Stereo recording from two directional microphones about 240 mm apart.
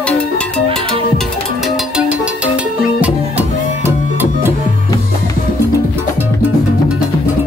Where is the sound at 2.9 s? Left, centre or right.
Centre.